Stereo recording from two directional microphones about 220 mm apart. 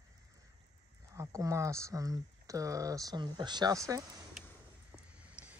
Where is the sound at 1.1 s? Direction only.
15° right (ahead or behind).